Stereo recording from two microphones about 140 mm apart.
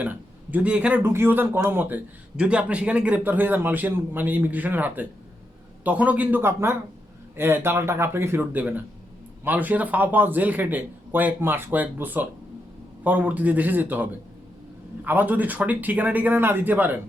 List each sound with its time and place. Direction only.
0.0 s speech: 10° right (ahead or behind)